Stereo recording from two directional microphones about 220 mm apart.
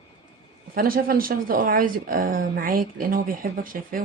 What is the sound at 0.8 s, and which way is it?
Speech, 40° right (ahead or behind).